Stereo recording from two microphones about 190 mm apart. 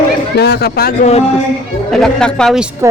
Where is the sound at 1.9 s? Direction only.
5° left (ahead or behind).